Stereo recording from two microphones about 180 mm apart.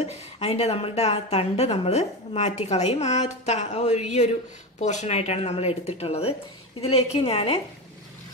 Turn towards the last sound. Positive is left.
turn(degrees=35)  # may be behind; listen again after turning